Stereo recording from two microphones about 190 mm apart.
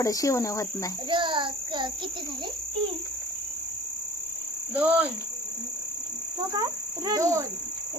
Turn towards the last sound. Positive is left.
turn(degrees=-15)  # may be behind; listen again after turning